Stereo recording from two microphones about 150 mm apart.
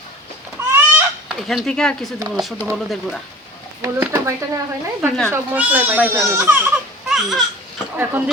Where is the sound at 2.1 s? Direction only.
25° right (ahead or behind).